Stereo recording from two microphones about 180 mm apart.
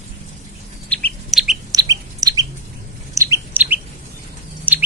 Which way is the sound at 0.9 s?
5° left (ahead or behind).